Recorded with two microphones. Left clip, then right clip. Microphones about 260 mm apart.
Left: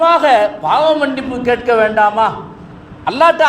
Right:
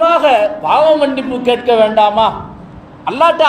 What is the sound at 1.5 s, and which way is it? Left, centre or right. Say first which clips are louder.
Speech: right 2 dB; left.